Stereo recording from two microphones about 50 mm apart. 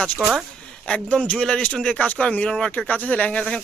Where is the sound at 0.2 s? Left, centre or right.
Centre.